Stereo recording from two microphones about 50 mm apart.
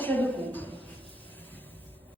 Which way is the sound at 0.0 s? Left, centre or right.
Left.